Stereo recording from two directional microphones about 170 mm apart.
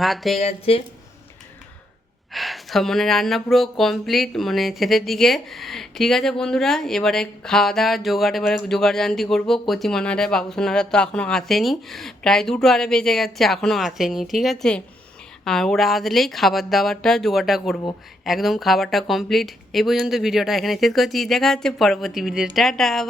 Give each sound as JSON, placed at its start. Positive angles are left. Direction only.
{"t": 0.0, "sound": "speech", "side_deg": 0}
{"t": 0.3, "sound": "speech", "side_deg": 35}
{"t": 2.3, "sound": "speech", "side_deg": 0}